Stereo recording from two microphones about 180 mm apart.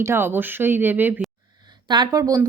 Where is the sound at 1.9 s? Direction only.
20° right (ahead or behind).